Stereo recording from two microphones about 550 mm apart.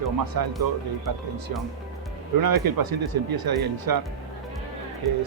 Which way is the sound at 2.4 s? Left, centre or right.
Right.